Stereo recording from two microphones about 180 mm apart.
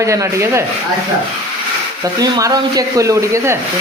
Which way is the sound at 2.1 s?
20° right (ahead or behind).